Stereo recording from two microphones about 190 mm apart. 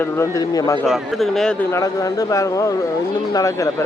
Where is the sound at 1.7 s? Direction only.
15° left (ahead or behind).